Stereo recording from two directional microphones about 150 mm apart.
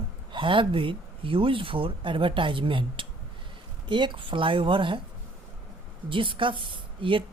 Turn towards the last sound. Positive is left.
turn(degrees=-35)  # may be behind; listen again after turning